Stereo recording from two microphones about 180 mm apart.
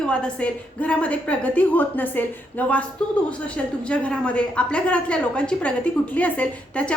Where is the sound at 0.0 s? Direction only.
5° left (ahead or behind).